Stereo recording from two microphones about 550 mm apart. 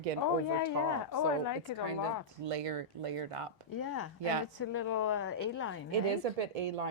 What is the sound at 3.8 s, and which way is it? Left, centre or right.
Speech, left.